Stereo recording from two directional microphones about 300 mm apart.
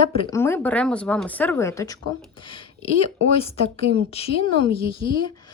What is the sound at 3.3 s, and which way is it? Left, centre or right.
A woman's voice, centre.